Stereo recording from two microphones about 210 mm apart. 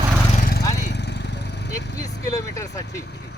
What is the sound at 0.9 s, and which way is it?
Vehicle, 55° left (ahead or behind).